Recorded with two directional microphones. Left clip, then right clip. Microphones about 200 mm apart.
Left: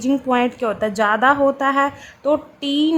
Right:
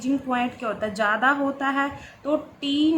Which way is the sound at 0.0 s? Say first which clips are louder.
Left 7 dB; 45° left (ahead or behind).